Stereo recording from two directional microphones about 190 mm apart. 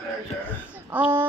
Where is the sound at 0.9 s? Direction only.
10° right (ahead or behind).